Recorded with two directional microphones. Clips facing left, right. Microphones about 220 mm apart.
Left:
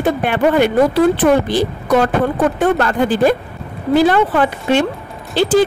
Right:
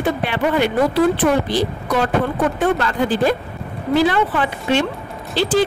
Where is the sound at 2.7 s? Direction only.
50° left (ahead or behind).